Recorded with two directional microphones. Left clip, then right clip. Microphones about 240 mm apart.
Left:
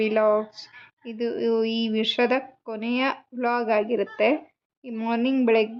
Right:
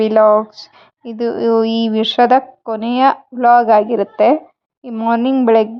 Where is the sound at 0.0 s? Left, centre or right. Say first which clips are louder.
Right 11 dB; right.